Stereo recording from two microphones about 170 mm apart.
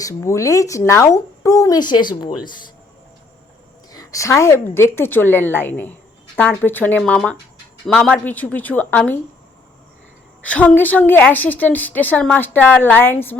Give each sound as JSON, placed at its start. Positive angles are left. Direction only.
{"t": 0.0, "sound": "speech", "side_deg": 15}
{"t": 3.9, "sound": "a woman's voice", "side_deg": 20}
{"t": 10.4, "sound": "a woman's voice", "side_deg": 10}